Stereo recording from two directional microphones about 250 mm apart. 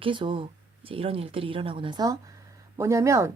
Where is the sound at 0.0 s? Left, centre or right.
Centre.